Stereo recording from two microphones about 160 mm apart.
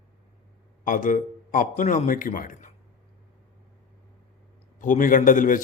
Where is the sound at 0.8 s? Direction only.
55° left (ahead or behind).